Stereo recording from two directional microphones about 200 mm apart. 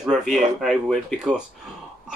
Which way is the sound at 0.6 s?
Centre (ahead or behind).